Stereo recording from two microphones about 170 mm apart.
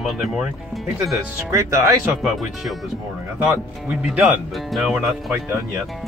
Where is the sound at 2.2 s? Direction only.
Centre (ahead or behind).